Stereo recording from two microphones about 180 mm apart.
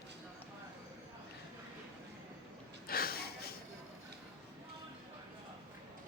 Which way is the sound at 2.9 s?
55° left (ahead or behind).